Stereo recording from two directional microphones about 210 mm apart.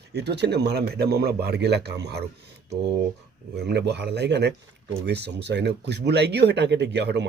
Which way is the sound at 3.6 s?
55° right (ahead or behind).